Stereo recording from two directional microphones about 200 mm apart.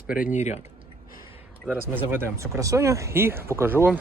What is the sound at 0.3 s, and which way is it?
Speech, 35° left (ahead or behind).